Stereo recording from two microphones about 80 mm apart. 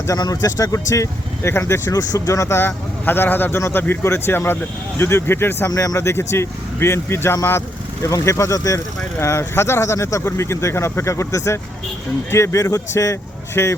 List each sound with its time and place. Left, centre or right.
0.2 s speech: left
1.9 s speech: left
5.7 s speech: left